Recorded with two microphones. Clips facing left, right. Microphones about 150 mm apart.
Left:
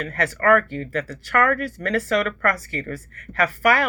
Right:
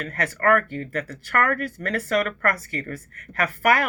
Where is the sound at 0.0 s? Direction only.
45° right (ahead or behind).